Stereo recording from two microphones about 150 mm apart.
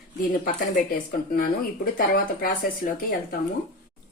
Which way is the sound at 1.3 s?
70° left (ahead or behind).